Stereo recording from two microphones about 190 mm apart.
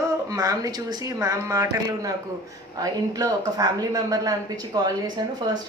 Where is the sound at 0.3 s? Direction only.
20° right (ahead or behind).